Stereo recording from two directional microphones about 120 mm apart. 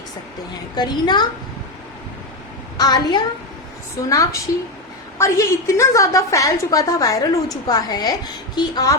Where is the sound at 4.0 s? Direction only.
25° left (ahead or behind).